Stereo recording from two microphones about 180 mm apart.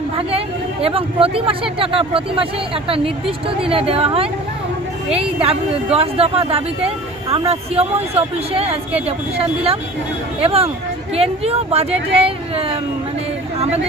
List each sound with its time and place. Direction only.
0.2 s speech: 30° right (ahead or behind)
5.4 s speech: 35° right (ahead or behind)